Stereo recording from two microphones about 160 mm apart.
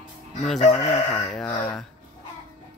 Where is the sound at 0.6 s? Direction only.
45° left (ahead or behind).